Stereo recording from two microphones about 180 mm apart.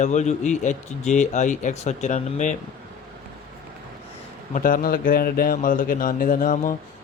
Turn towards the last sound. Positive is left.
turn(degrees=50)  # may be behind; listen again after turning